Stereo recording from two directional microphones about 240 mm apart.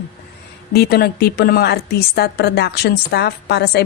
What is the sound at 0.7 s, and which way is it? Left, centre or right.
A woman's voice, left.